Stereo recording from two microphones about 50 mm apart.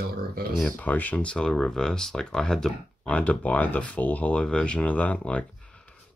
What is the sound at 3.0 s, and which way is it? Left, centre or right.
Speech, left.